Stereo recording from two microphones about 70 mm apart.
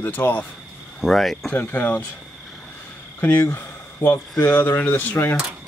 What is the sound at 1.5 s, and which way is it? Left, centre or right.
Speech, left.